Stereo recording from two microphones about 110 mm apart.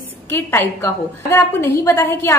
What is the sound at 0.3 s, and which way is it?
A woman's voice, 20° left (ahead or behind).